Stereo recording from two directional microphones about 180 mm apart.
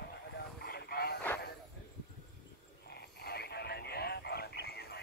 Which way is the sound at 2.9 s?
65° left (ahead or behind).